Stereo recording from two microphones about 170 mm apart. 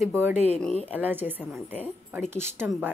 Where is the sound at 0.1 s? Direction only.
10° right (ahead or behind).